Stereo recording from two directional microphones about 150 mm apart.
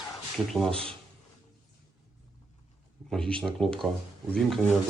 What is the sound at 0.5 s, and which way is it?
Speech, centre (ahead or behind).